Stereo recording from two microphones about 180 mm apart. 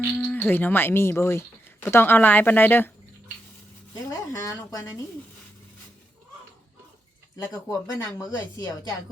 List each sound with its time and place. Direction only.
0.2 s speech: 10° left (ahead or behind)
4.1 s speech: 15° left (ahead or behind)
7.3 s speech: 15° left (ahead or behind)